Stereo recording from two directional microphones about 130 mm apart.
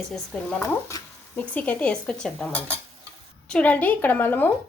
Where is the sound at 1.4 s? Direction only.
10° left (ahead or behind).